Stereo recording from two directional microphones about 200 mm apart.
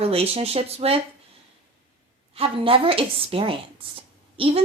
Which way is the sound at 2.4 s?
25° right (ahead or behind).